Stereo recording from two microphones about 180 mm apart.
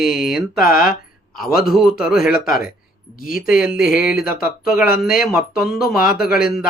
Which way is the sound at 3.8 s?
50° left (ahead or behind).